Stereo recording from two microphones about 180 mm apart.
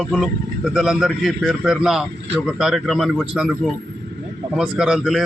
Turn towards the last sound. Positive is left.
turn(degrees=-5)  # may be behind; listen again after turning